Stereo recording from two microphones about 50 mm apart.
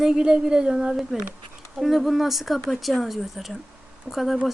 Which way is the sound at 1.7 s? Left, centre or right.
Centre.